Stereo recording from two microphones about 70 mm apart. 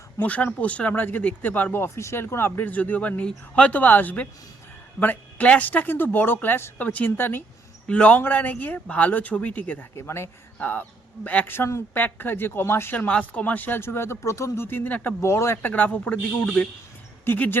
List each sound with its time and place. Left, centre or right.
0.2 s speech: left
2.0 s speech: left
2.2 s speech: left
7.9 s a man's voice: centre
9.9 s speech: left
10.6 s speech: left
13.1 s speech: centre; by 14.8 s left
14.8 s speech: left
15.2 s speech: left
15.6 s speech: left